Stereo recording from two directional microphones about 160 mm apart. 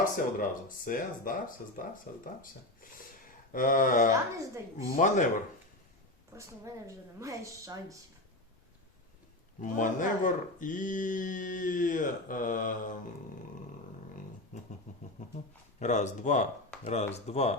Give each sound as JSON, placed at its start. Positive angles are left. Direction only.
{"t": 0.0, "sound": "speech", "side_deg": 60}
{"t": 3.5, "sound": "speech", "side_deg": 60}
{"t": 6.3, "sound": "a woman's voice", "side_deg": -20}
{"t": 9.6, "sound": "speech", "side_deg": 55}
{"t": 14.5, "sound": "a sound", "side_deg": 55}
{"t": 15.8, "sound": "speech", "side_deg": 45}